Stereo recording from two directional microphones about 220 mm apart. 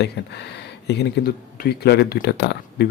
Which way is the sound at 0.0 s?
50° left (ahead or behind).